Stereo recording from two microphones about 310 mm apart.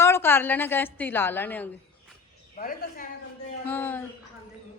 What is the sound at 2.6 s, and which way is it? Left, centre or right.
Speech, left.